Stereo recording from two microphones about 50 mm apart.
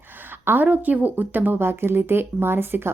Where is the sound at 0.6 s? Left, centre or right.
Right.